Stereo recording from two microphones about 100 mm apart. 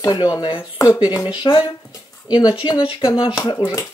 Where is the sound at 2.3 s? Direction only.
50° left (ahead or behind).